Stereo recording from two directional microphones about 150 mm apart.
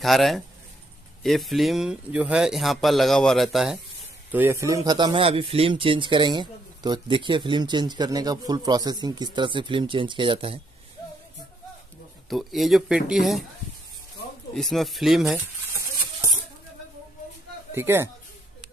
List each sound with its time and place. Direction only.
0.0 s speech: centre (ahead or behind)
4.3 s speech: 15° right (ahead or behind); by 10.6 s 35° right (ahead or behind)
12.3 s speech: centre (ahead or behind)
14.5 s speech: centre (ahead or behind)
15.3 s a sound: 15° right (ahead or behind)
17.7 s a woman's voice: 15° right (ahead or behind)